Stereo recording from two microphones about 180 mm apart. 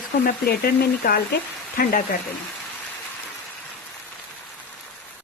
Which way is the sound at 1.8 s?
50° left (ahead or behind).